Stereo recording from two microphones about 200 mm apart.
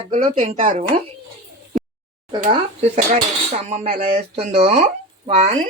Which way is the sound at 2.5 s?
30° right (ahead or behind).